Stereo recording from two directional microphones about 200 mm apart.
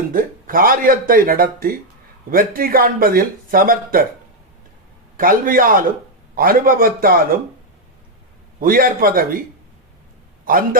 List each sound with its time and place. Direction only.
0.1 s speech: 45° right (ahead or behind)
5.1 s speech: 45° right (ahead or behind)
8.5 s speech: 45° right (ahead or behind)
10.4 s a man's voice: 45° right (ahead or behind)